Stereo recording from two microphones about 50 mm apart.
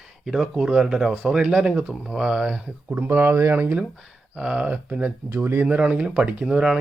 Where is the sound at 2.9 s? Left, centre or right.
Right.